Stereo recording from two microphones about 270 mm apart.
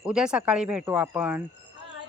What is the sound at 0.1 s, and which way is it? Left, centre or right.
Speech, centre.